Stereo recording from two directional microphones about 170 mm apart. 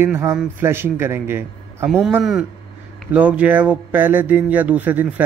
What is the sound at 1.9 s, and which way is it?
A man's voice, centre (ahead or behind).